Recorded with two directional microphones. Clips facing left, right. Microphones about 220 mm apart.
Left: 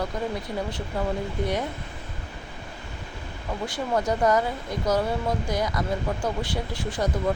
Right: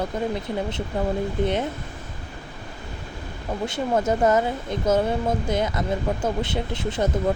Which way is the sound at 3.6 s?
25° right (ahead or behind).